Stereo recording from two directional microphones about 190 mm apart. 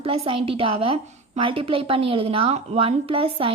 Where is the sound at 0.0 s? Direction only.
30° right (ahead or behind).